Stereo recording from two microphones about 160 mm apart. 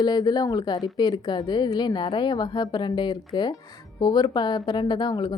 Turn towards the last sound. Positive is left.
turn(degrees=30)  # may be behind; listen again after turning